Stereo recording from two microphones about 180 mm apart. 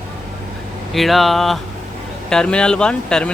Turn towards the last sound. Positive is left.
turn(degrees=5)  # may be behind; listen again after turning